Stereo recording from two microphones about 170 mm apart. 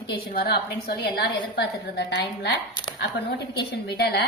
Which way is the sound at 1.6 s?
90° left.